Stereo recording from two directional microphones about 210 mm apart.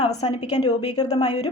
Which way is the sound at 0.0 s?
30° left (ahead or behind).